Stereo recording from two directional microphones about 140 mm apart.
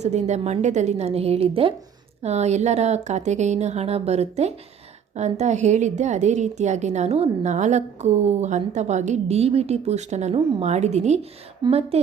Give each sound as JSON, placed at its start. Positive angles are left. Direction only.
{"t": 0.0, "sound": "a woman's voice", "side_deg": -55}